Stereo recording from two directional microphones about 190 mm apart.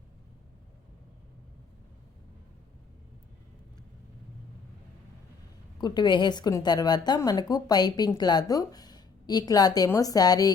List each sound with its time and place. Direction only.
5.8 s a woman's voice: 20° left (ahead or behind)